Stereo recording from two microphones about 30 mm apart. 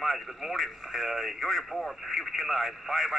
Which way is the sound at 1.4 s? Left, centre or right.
Centre.